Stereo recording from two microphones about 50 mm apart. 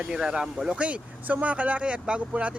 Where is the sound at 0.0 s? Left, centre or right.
Centre.